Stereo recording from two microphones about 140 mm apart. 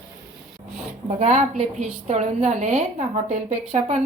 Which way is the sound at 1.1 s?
50° right (ahead or behind).